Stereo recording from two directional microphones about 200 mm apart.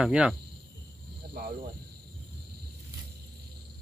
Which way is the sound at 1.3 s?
50° right (ahead or behind).